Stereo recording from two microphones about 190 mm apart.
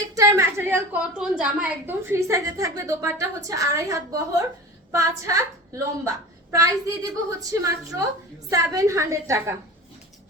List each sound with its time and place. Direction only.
0.1 s a woman's voice: 15° right (ahead or behind)